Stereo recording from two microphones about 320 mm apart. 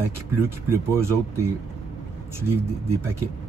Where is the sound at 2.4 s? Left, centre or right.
Centre.